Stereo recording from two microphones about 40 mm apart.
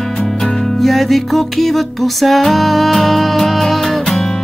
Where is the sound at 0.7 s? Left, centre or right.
Centre.